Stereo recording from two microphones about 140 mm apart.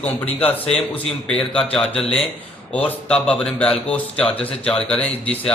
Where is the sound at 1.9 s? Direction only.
45° left (ahead or behind).